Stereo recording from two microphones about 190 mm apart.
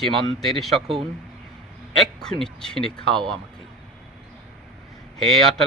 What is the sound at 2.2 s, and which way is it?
Speech, 5° left (ahead or behind).